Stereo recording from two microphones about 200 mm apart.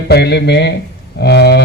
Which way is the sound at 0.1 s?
55° left (ahead or behind).